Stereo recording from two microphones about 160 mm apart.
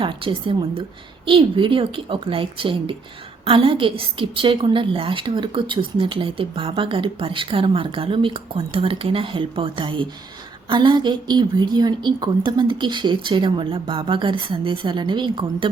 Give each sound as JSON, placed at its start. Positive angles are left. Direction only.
{"t": 0.0, "sound": "a woman's voice", "side_deg": -35}